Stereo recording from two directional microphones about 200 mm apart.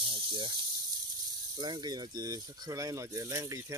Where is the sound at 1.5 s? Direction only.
20° right (ahead or behind).